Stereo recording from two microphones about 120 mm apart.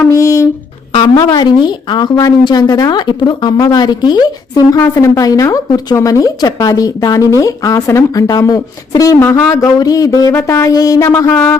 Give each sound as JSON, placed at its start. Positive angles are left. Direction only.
{"t": 0.1, "sound": "a sound", "side_deg": 25}
{"t": 1.1, "sound": "a woman's voice", "side_deg": 30}
{"t": 4.8, "sound": "a woman's voice", "side_deg": 20}
{"t": 11.3, "sound": "music", "side_deg": 10}